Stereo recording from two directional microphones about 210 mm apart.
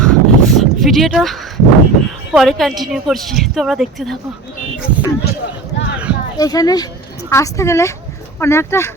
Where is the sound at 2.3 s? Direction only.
Centre (ahead or behind).